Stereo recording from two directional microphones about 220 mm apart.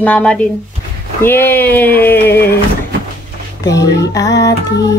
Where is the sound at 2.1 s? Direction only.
45° left (ahead or behind).